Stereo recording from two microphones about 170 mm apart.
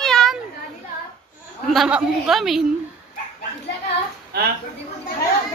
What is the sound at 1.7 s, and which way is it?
Speech, 5° right (ahead or behind).